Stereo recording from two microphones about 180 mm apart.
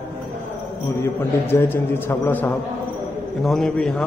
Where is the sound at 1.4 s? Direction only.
10° left (ahead or behind).